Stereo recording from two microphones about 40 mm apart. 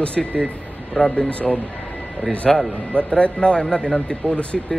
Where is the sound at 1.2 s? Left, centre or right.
Left.